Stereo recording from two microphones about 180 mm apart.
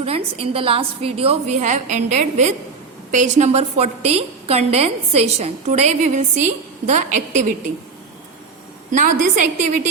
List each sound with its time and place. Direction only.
0.0 s a woman's voice: 30° right (ahead or behind)
8.9 s a woman's voice: 45° right (ahead or behind)